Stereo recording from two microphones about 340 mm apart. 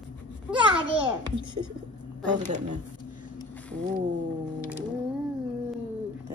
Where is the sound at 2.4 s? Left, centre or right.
Right.